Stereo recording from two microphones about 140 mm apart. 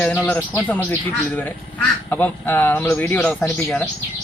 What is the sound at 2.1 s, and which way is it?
A man's voice, 15° left (ahead or behind).